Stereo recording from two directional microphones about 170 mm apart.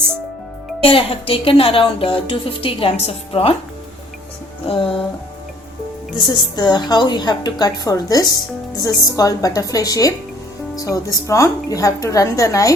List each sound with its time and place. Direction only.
0.8 s speech: 35° left (ahead or behind)
4.6 s speech: 30° left (ahead or behind)
6.1 s a woman's voice: 25° left (ahead or behind)